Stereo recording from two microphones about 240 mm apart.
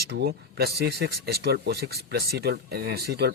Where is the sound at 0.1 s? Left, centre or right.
Right.